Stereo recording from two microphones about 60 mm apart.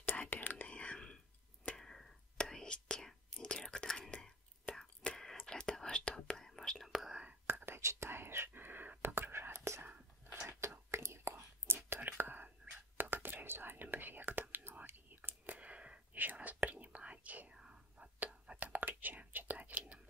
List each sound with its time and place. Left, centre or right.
0.0 s whispering: left
0.7 s whispering: centre
1.8 s a sound: centre
2.4 s whispering: centre
6.9 s whispering: centre
7.4 s whispering: right
10.9 s whispering: right
17.6 s whispering: centre